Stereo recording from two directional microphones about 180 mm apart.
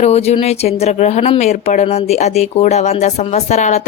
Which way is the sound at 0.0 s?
35° left (ahead or behind).